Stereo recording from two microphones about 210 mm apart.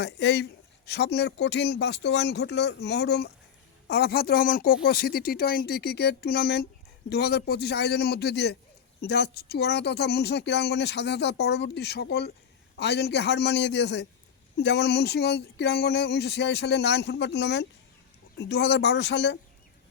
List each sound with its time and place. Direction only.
0.0 s speech: 55° left (ahead or behind)